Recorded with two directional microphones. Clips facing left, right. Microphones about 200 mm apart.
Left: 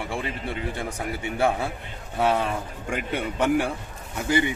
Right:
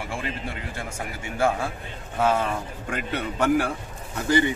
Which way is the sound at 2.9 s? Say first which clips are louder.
Left 1 dB; 10° left (ahead or behind).